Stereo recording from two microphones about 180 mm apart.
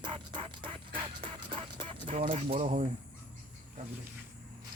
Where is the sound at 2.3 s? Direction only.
35° right (ahead or behind).